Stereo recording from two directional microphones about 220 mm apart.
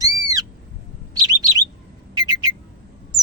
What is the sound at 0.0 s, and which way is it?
Owl, 15° right (ahead or behind).